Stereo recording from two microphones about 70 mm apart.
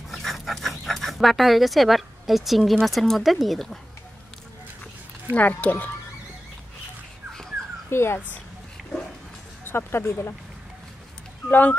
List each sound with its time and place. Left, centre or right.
0.1 s speech: centre
5.3 s speech: left
7.9 s speech: left
9.7 s speech: left
11.4 s speech: left